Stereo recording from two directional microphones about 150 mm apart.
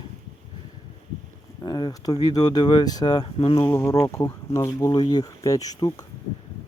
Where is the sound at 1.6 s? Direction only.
25° left (ahead or behind).